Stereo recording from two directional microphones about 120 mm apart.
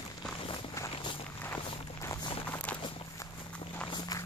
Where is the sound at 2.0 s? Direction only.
20° left (ahead or behind).